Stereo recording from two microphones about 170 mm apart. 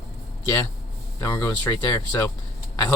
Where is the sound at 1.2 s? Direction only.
15° left (ahead or behind).